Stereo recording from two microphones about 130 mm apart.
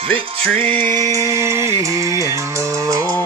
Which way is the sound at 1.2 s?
20° right (ahead or behind).